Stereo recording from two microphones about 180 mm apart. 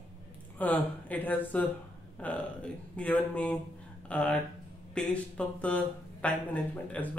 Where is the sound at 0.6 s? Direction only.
10° left (ahead or behind).